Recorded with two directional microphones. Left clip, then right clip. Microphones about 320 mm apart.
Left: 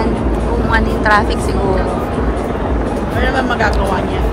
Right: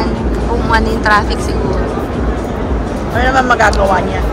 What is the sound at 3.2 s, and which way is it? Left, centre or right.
Speech, centre.